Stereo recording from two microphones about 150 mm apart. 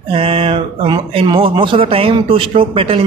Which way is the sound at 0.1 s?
40° right (ahead or behind).